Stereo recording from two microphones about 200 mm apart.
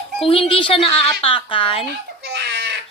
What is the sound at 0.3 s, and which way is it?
A woman's voice, 25° left (ahead or behind).